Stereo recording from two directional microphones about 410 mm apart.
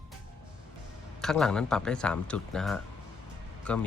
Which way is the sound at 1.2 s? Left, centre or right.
Centre.